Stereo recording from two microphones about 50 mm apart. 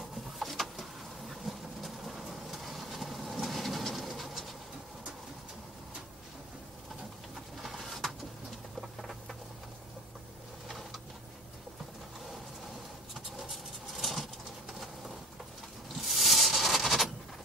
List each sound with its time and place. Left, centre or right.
0.4 s vehicle: centre
7.6 s bird: centre
13.1 s rodents: centre
16.0 s a sound: centre